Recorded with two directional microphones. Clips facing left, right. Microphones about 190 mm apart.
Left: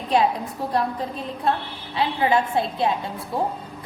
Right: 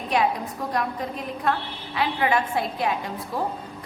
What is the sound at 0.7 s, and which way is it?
A woman's voice, 30° left (ahead or behind).